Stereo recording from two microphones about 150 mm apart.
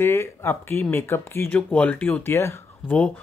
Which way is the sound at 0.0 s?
15° left (ahead or behind).